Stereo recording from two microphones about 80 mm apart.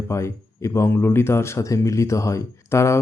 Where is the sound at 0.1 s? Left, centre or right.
Left.